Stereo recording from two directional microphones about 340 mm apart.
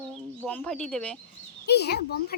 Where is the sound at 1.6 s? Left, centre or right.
Left.